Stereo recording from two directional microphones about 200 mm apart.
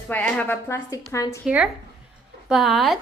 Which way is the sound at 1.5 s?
5° right (ahead or behind).